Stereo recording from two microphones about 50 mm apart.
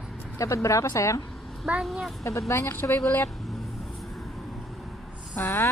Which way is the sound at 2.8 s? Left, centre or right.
Left.